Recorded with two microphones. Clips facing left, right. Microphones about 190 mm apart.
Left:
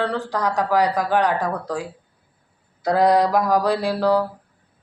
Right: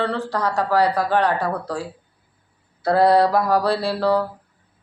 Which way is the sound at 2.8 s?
15° left (ahead or behind).